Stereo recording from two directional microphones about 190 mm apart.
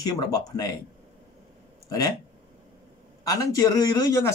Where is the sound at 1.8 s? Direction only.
20° left (ahead or behind).